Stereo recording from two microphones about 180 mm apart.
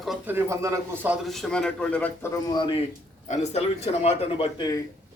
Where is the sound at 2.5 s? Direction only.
25° left (ahead or behind).